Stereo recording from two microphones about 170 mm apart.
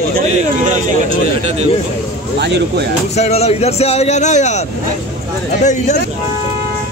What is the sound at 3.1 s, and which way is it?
Speech, 40° left (ahead or behind).